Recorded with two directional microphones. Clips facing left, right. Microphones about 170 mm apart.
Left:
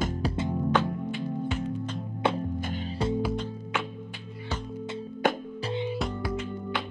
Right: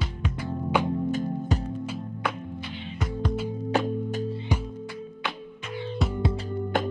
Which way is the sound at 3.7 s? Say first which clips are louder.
Right 10 dB; 40° right (ahead or behind).